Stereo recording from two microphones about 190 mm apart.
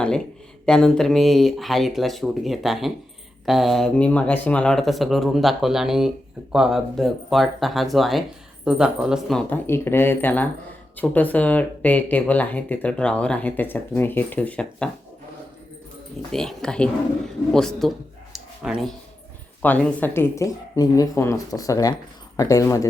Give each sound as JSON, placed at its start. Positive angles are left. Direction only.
{"t": 0.6, "sound": "speech", "side_deg": 5}
{"t": 9.5, "sound": "speech", "side_deg": 10}
{"t": 16.3, "sound": "speech", "side_deg": 5}
{"t": 18.3, "sound": "a sound", "side_deg": 0}
{"t": 19.6, "sound": "speech", "side_deg": 10}